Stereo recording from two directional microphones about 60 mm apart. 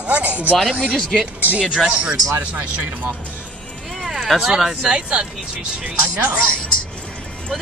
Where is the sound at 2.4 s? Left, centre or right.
Right.